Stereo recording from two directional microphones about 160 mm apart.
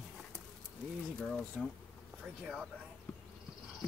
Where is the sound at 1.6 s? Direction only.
Centre (ahead or behind).